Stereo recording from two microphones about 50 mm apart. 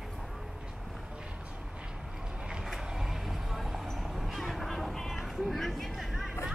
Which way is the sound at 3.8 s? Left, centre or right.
Centre.